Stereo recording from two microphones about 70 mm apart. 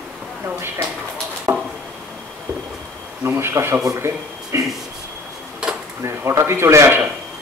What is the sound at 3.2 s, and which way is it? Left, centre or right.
A man's voice, right.